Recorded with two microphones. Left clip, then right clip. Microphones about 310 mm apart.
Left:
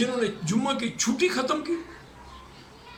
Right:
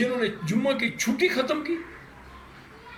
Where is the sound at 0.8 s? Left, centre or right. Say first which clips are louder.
Right 1 dB; left.